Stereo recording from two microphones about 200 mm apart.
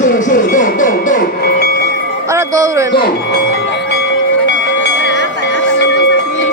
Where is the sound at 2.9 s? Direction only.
55° left (ahead or behind).